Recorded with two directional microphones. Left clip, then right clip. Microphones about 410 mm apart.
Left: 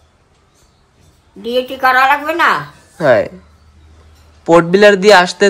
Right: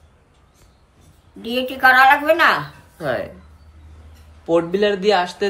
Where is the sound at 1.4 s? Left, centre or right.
Centre.